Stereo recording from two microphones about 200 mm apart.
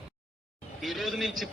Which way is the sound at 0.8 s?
Centre (ahead or behind).